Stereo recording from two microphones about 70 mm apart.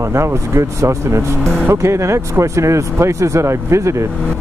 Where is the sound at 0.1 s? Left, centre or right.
Right.